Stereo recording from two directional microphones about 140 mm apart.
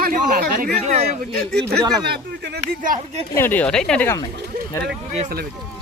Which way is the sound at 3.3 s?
15° left (ahead or behind).